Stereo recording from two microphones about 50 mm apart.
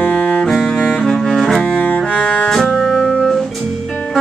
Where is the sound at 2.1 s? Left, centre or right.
Left.